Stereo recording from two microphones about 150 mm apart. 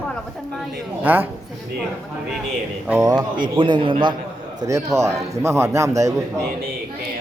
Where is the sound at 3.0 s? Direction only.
25° right (ahead or behind).